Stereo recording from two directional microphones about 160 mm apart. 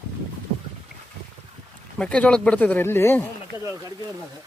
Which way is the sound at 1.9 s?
5° left (ahead or behind).